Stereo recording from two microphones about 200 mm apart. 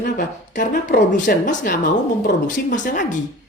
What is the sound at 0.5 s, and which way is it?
A man's voice, 40° left (ahead or behind).